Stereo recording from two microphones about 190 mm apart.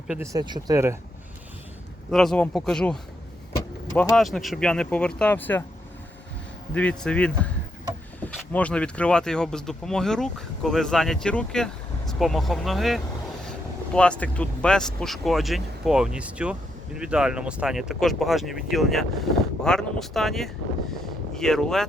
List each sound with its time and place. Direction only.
0.2 s speech: 20° right (ahead or behind)
2.0 s speech: centre (ahead or behind)
6.7 s speech: 5° left (ahead or behind)